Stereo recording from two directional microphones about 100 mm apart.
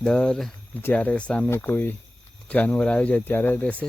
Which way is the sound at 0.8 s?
15° left (ahead or behind).